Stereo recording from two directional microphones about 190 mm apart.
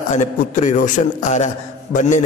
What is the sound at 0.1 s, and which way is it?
A man's voice, 40° left (ahead or behind).